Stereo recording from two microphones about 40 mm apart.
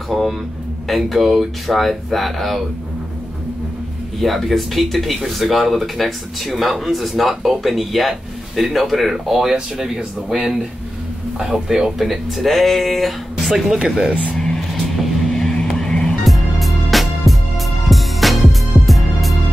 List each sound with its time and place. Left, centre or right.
0.1 s speech: centre
4.2 s speech: centre
9.5 s speech: centre
12.0 s speech: centre
13.8 s speech: centre
14.3 s vehicle: centre
15.5 s vehicle: centre
16.3 s music: centre